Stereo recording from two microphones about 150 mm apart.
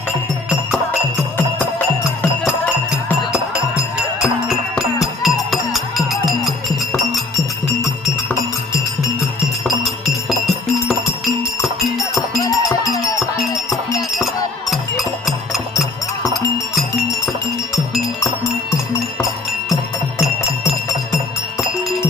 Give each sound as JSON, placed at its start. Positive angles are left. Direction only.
{"t": 2.4, "sound": "music", "side_deg": -5}
{"t": 9.8, "sound": "music", "side_deg": 0}
{"t": 12.4, "sound": "music", "side_deg": 25}